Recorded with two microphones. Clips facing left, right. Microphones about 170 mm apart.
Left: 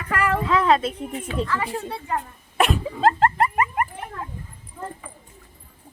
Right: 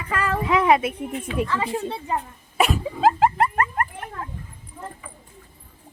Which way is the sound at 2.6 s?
Centre (ahead or behind).